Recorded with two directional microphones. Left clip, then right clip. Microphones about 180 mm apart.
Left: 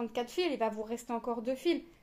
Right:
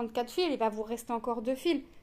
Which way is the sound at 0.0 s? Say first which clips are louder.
Right 2 dB; 25° right (ahead or behind).